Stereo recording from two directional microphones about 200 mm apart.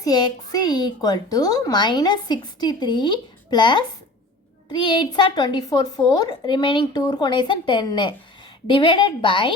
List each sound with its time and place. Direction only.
0.0 s a woman's voice: 20° left (ahead or behind)